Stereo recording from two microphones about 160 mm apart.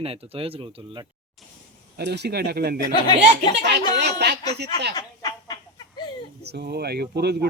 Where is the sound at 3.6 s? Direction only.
90° right.